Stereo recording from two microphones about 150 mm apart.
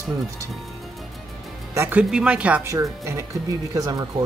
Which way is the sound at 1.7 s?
20° right (ahead or behind).